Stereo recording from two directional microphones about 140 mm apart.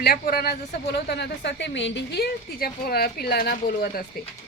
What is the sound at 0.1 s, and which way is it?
Speech, 90° left.